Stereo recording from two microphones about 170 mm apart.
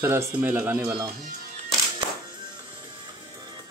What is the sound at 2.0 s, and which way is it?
Music, 30° right (ahead or behind).